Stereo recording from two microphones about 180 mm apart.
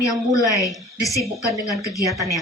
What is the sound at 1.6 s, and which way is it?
Speech, 20° left (ahead or behind).